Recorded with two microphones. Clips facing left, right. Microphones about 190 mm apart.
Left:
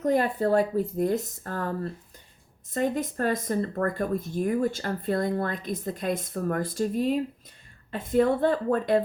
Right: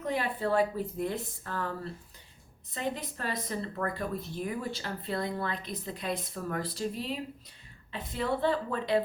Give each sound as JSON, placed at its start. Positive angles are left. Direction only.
{"t": 0.0, "sound": "speech", "side_deg": 45}